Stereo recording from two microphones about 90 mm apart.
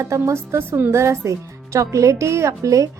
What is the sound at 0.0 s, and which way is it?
A woman's voice, 35° right (ahead or behind).